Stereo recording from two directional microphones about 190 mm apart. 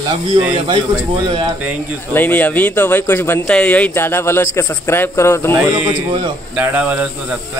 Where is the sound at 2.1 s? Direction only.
10° left (ahead or behind).